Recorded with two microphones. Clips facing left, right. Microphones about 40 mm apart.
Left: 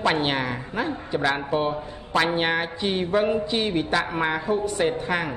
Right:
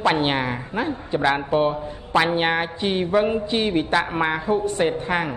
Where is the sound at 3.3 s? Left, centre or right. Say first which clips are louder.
Right 2 dB; right.